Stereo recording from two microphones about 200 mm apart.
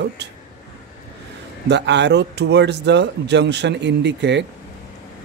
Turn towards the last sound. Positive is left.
turn(degrees=-60)  # may be behind; listen again after turning